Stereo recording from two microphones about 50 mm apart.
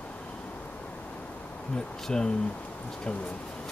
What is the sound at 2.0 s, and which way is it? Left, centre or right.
Speech, centre.